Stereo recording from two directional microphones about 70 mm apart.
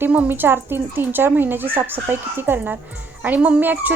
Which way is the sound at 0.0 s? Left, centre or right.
Right.